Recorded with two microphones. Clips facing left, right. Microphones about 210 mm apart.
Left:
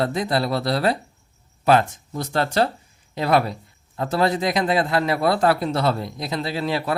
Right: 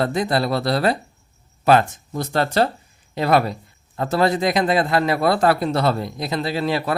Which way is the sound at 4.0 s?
50° right (ahead or behind).